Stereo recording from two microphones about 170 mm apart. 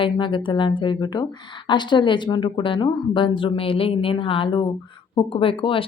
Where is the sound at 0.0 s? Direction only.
30° left (ahead or behind).